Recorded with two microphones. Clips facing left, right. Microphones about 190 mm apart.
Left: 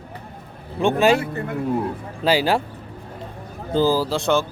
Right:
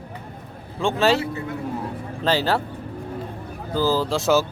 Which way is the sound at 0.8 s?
15° left (ahead or behind).